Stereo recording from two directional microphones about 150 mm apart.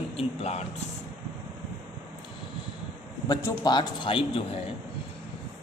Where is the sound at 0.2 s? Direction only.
45° left (ahead or behind).